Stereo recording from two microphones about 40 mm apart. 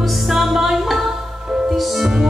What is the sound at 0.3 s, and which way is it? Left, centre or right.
Music, centre.